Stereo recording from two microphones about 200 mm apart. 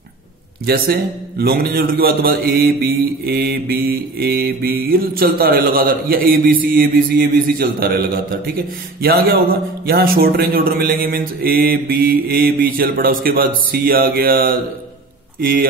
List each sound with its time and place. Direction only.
0.7 s a man's voice: 50° right (ahead or behind)